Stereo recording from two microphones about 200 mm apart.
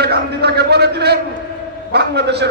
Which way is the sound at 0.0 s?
55° right (ahead or behind).